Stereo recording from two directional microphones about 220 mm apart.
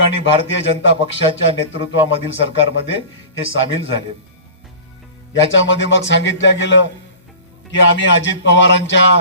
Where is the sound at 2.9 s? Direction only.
60° left (ahead or behind).